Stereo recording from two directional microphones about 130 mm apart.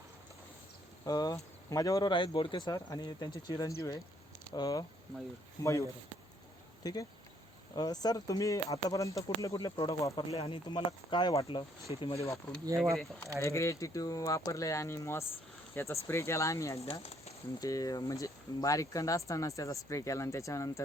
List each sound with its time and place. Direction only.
1.0 s speech: 30° left (ahead or behind)
6.8 s speech: 30° left (ahead or behind)
10.3 s speech: 45° left (ahead or behind)
12.8 s speech: centre (ahead or behind)
13.4 s speech: 25° left (ahead or behind)
16.9 s speech: 55° left (ahead or behind)
17.6 s speech: 25° left (ahead or behind)